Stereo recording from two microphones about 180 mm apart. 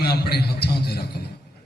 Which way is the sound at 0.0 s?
60° left (ahead or behind).